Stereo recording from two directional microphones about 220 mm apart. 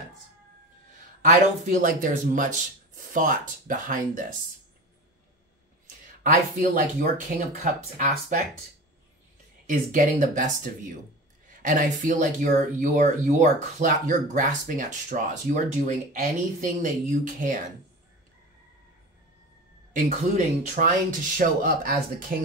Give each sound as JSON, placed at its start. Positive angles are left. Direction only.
{"t": 1.2, "sound": "speech", "side_deg": -35}
{"t": 6.2, "sound": "speech", "side_deg": -35}
{"t": 9.7, "sound": "speech", "side_deg": -35}
{"t": 19.9, "sound": "speech", "side_deg": -35}